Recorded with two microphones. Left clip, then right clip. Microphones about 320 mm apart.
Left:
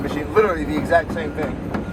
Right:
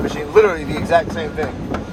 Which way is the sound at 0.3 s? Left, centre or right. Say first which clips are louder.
Right 4 dB; right.